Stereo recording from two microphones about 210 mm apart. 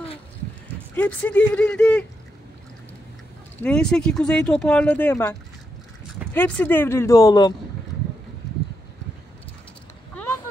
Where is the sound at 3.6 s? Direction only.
5° left (ahead or behind).